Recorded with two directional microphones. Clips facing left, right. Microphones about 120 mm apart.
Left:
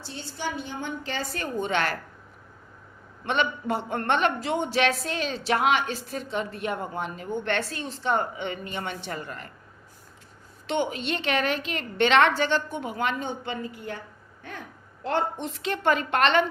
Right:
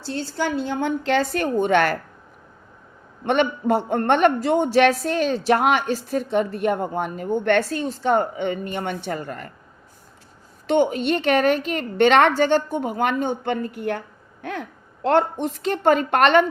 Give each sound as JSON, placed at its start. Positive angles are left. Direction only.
{"t": 0.0, "sound": "a woman's voice", "side_deg": -90}
{"t": 3.2, "sound": "a woman's voice", "side_deg": -50}
{"t": 10.7, "sound": "a woman's voice", "side_deg": -45}
{"t": 14.4, "sound": "a sound", "side_deg": -80}
{"t": 15.4, "sound": "a woman's voice", "side_deg": -45}